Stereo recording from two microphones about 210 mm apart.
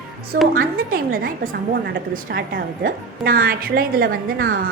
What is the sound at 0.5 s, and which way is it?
A woman's voice, 45° right (ahead or behind).